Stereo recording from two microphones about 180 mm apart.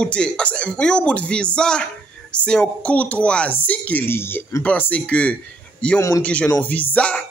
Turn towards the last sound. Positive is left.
turn(degrees=10)  # may be behind; listen again after turning